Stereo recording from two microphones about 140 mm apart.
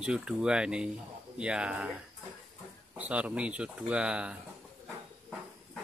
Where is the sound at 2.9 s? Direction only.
10° right (ahead or behind).